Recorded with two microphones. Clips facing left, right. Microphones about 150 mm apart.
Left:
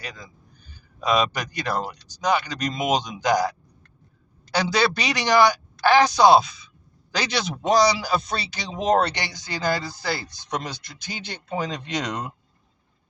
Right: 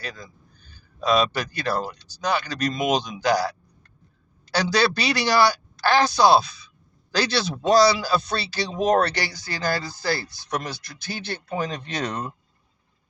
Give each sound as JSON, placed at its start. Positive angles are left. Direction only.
{"t": 0.7, "sound": "speech", "side_deg": 15}
{"t": 4.9, "sound": "a man's voice", "side_deg": 20}